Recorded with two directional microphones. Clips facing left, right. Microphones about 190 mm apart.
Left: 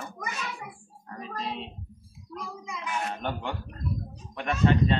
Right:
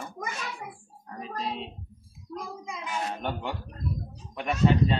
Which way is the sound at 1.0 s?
Centre (ahead or behind).